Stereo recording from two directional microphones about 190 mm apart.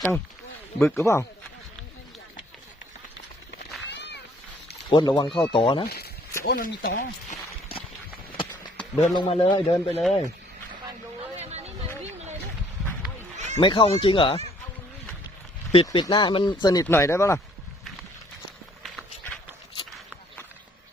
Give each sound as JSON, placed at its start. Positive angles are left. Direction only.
{"t": 0.8, "sound": "speech", "side_deg": 15}
{"t": 3.6, "sound": "a sound", "side_deg": 65}
{"t": 4.7, "sound": "speech", "side_deg": 25}
{"t": 6.4, "sound": "speech", "side_deg": 50}
{"t": 9.0, "sound": "speech", "side_deg": 30}
{"t": 11.3, "sound": "a sound", "side_deg": -35}
{"t": 13.3, "sound": "run", "side_deg": -40}
{"t": 13.6, "sound": "speech", "side_deg": 25}
{"t": 15.7, "sound": "speech", "side_deg": 25}
{"t": 18.8, "sound": "clip-clop", "side_deg": 0}